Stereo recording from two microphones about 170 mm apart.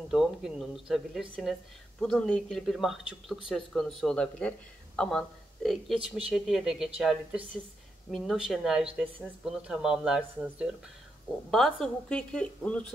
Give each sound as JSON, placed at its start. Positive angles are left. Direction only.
{"t": 0.1, "sound": "speech", "side_deg": 0}
{"t": 5.9, "sound": "speech", "side_deg": -35}
{"t": 6.3, "sound": "speech", "side_deg": 0}